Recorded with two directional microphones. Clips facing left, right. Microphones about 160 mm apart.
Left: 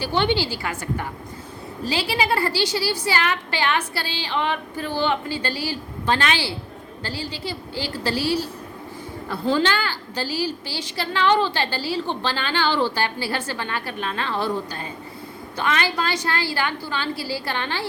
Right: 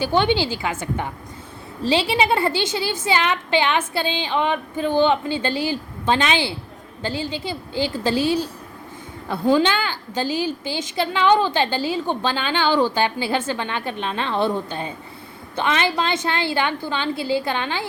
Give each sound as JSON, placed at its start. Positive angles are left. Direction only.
{"t": 0.0, "sound": "a woman's voice", "side_deg": -15}
{"t": 1.8, "sound": "a woman's voice", "side_deg": -25}